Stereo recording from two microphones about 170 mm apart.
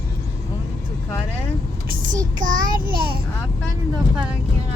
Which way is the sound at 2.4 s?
50° right (ahead or behind).